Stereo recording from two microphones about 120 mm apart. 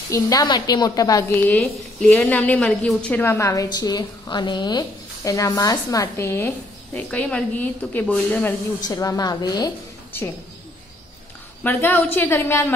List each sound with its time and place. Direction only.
0.1 s a woman's voice: 30° left (ahead or behind)
1.3 s a woman's voice: 15° left (ahead or behind)
1.6 s a woman's voice: 5° left (ahead or behind); by 3.6 s 25° left (ahead or behind)
3.6 s speech: 35° left (ahead or behind)
7.1 s a woman's voice: 10° left (ahead or behind)
8.8 s a woman's voice: 30° left (ahead or behind)
11.6 s a woman's voice: 15° left (ahead or behind)